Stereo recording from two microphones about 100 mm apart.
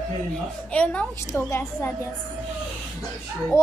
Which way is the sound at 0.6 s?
10° left (ahead or behind).